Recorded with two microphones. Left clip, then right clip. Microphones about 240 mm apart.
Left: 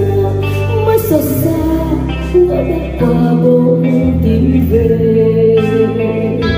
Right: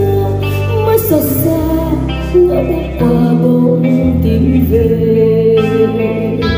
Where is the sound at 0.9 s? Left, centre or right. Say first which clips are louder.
Even; right.